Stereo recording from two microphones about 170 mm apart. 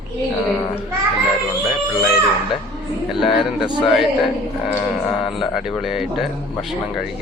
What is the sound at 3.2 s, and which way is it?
Speech, centre (ahead or behind).